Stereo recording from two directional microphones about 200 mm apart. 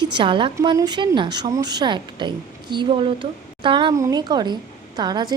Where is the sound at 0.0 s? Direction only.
25° right (ahead or behind).